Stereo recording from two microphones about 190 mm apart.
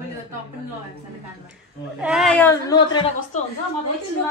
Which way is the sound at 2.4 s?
20° left (ahead or behind).